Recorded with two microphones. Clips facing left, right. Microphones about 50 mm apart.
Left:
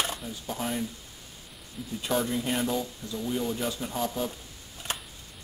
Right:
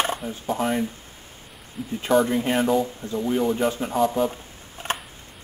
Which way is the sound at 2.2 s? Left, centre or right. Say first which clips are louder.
Right 7 dB; right.